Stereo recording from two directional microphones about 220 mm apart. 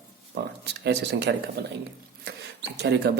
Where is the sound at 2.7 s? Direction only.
50° right (ahead or behind).